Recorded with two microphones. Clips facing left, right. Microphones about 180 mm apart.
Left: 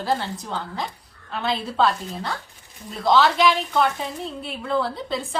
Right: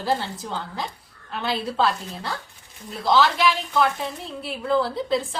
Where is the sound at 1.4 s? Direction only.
Centre (ahead or behind).